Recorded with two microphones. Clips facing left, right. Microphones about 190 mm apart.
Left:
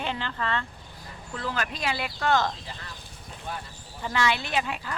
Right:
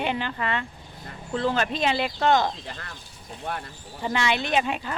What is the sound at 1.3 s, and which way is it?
Speech, 30° right (ahead or behind).